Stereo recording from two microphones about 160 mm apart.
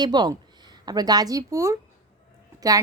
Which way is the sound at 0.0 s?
25° right (ahead or behind).